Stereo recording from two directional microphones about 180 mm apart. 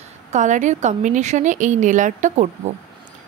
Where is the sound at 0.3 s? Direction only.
45° right (ahead or behind).